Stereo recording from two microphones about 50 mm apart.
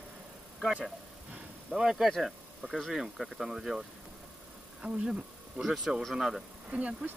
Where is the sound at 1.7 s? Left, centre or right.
Centre.